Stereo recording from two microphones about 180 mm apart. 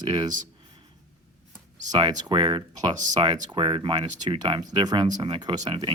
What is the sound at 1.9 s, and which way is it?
Speech, 25° right (ahead or behind).